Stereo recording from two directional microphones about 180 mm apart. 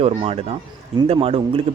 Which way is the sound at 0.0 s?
35° right (ahead or behind).